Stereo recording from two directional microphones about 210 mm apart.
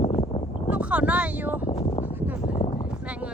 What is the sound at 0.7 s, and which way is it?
Speech, 5° right (ahead or behind).